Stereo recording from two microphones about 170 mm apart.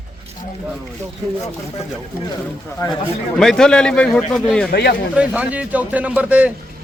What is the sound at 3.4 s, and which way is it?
Speech, 5° left (ahead or behind).